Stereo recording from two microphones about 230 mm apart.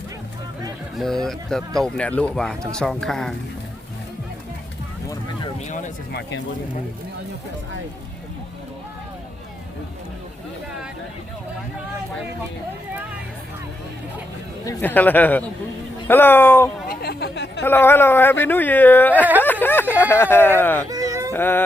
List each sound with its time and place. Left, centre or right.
0.9 s speech: centre
5.5 s speech: left
14.6 s speech: centre
16.9 s a sound: left
17.6 s speech: centre
20.9 s baby cry: centre
21.3 s speech: centre